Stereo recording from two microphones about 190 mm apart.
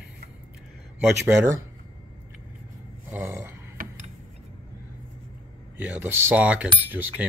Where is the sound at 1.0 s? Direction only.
5° right (ahead or behind).